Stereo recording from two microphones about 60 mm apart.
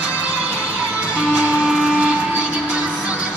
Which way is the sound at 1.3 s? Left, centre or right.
Right.